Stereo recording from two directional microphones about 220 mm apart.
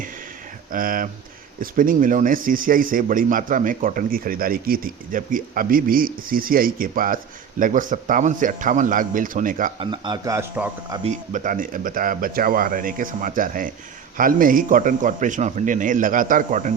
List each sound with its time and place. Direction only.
0.7 s speech: 40° right (ahead or behind)
9.7 s speech: 20° right (ahead or behind)
11.0 s speech: 35° right (ahead or behind)